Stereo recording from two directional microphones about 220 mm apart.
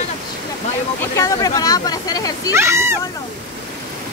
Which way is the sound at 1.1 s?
15° left (ahead or behind).